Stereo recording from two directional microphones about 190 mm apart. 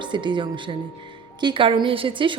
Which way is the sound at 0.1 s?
25° right (ahead or behind).